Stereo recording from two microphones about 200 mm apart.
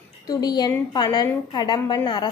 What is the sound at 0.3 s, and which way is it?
A woman's voice, 20° left (ahead or behind).